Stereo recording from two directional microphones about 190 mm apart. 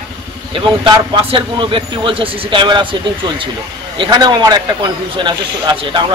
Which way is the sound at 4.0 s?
20° right (ahead or behind).